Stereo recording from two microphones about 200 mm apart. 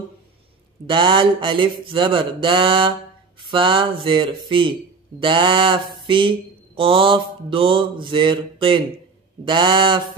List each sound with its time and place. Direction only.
0.8 s mantra: 25° right (ahead or behind)